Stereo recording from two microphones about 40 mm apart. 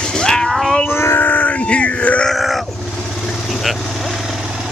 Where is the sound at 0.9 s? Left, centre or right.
Left.